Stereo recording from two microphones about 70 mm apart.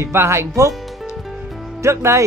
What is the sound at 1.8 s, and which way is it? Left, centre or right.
Speech, right.